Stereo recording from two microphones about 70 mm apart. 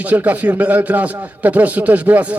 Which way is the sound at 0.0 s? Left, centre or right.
Right.